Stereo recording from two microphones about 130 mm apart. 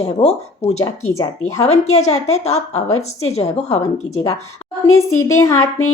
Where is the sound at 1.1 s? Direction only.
25° left (ahead or behind).